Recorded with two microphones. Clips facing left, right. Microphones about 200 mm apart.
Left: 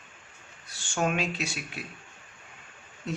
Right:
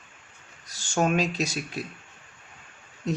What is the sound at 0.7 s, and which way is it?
Speech, 40° right (ahead or behind).